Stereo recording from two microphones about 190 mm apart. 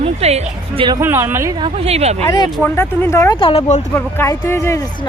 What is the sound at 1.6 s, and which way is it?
Speech, 30° right (ahead or behind).